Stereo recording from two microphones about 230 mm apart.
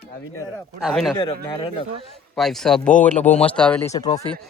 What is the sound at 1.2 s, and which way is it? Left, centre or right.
Speech, centre.